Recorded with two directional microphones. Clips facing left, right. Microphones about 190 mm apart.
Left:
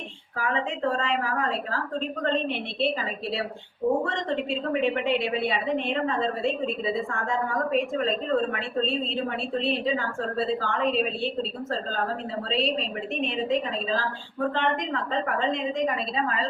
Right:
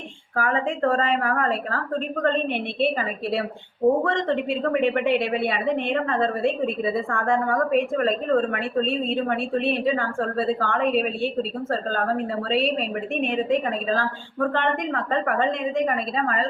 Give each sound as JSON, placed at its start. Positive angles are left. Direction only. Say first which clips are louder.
{"t": 0.3, "sound": "a woman's voice", "louder": "right 4 dB", "side_deg": -50}